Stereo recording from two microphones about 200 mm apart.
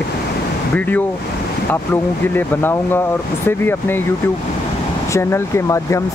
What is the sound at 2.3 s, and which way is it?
Speech, 10° left (ahead or behind).